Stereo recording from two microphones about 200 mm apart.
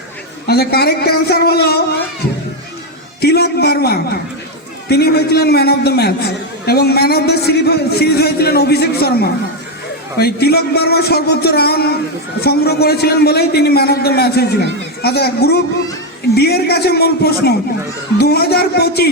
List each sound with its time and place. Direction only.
0.4 s a man's voice: 50° left (ahead or behind)
3.2 s a man's voice: 50° left (ahead or behind)